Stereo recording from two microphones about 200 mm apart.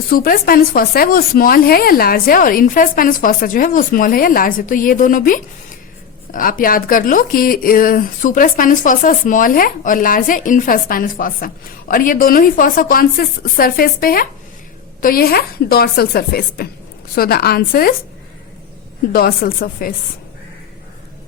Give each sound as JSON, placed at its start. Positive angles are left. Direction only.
{"t": 0.1, "sound": "speech", "side_deg": 45}
{"t": 19.1, "sound": "speech", "side_deg": 50}